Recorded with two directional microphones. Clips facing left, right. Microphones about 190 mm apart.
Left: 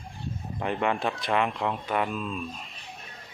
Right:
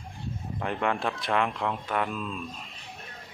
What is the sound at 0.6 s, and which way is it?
Speech, 5° left (ahead or behind).